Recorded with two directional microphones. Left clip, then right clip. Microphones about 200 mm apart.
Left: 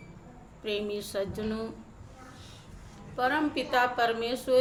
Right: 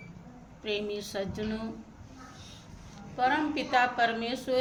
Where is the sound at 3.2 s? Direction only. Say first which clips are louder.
Even; 20° left (ahead or behind).